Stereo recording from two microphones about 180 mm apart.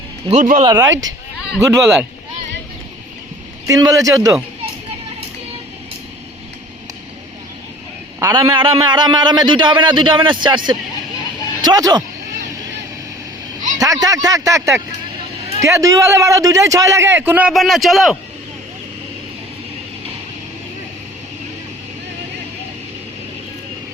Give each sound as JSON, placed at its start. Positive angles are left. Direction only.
{"t": 0.3, "sound": "speech", "side_deg": -45}
{"t": 0.6, "sound": "a man's voice", "side_deg": -20}
{"t": 1.5, "sound": "speech", "side_deg": 0}
{"t": 3.7, "sound": "a man's voice", "side_deg": -20}
{"t": 8.2, "sound": "a man's voice", "side_deg": -15}
{"t": 13.7, "sound": "a man's voice", "side_deg": -20}